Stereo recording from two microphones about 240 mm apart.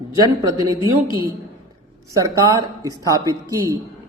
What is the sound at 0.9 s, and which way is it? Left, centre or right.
Speech, right.